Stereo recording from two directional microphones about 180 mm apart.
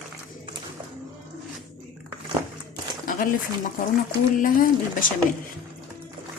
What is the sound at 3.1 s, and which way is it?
A woman's voice, 50° left (ahead or behind).